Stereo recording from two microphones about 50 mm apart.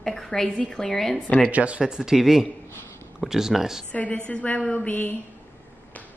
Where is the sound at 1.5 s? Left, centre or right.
Right.